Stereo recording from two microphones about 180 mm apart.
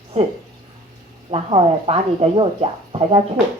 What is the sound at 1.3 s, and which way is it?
Speech, 35° right (ahead or behind).